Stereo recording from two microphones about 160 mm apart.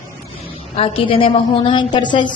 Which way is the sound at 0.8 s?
35° left (ahead or behind).